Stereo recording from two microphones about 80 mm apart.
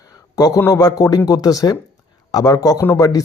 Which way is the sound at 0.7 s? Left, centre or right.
Left.